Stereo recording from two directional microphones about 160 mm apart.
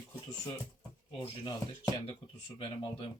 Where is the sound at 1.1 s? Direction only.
30° left (ahead or behind).